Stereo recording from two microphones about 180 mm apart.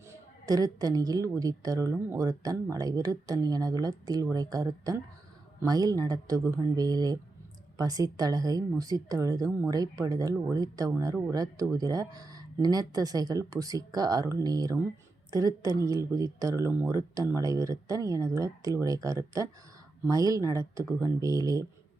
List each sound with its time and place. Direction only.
0.1 s a woman's voice: 20° right (ahead or behind)